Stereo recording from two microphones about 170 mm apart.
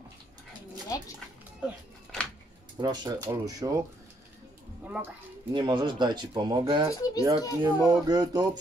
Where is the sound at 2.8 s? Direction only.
25° right (ahead or behind).